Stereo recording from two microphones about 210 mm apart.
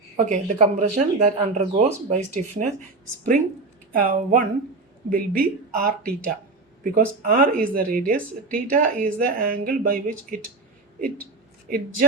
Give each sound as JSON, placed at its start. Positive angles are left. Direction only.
{"t": 0.2, "sound": "speech", "side_deg": -35}
{"t": 3.9, "sound": "speech", "side_deg": -40}
{"t": 11.7, "sound": "speech", "side_deg": -40}